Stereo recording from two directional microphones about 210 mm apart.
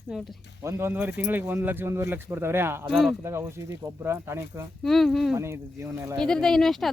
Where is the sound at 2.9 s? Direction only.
Centre (ahead or behind).